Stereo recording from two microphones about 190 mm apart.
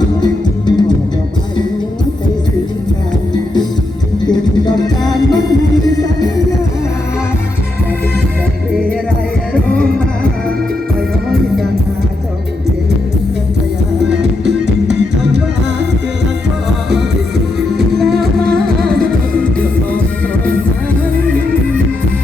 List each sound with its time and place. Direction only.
0.2 s music: 20° left (ahead or behind)
4.6 s music: 20° left (ahead or behind)
17.9 s music: centre (ahead or behind)